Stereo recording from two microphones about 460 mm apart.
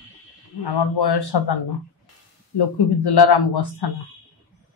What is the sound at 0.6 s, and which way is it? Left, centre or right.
Speech, left.